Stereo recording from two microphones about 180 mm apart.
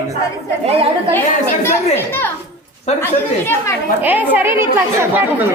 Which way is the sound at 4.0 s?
10° right (ahead or behind).